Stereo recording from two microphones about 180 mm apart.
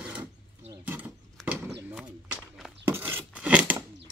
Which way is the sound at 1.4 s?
Centre (ahead or behind).